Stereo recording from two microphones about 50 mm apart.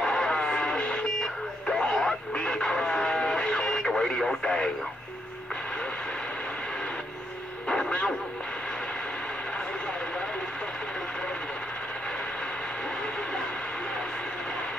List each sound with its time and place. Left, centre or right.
0.0 s music: centre
1.1 s vehicle: centre
2.3 s radio: centre
7.6 s radio: centre